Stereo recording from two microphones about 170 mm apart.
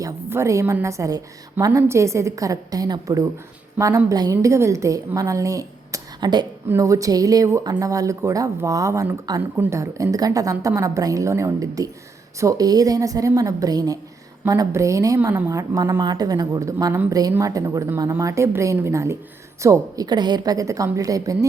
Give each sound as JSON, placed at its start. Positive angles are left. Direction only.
{"t": 0.0, "sound": "a woman's voice", "side_deg": -15}